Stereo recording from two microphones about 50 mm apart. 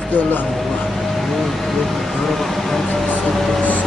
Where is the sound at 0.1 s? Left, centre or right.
Left.